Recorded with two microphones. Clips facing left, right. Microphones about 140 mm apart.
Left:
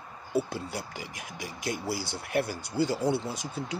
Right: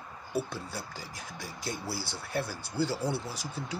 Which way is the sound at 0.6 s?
15° left (ahead or behind).